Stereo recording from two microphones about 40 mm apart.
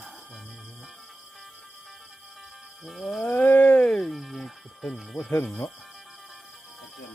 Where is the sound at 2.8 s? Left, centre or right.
Centre.